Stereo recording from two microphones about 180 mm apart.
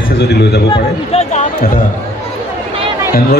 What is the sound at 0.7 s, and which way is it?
Speech, 35° left (ahead or behind).